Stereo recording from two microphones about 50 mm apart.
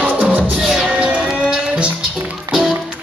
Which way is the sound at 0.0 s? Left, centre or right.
Right.